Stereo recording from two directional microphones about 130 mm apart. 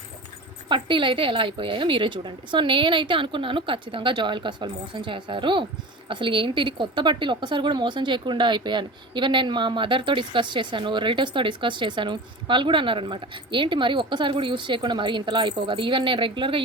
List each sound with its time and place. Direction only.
0.7 s a woman's voice: 40° right (ahead or behind)